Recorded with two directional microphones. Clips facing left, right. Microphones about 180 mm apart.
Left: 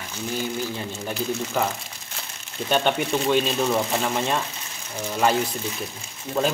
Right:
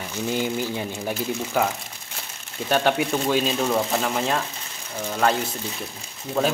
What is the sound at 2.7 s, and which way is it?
Speech, 5° right (ahead or behind).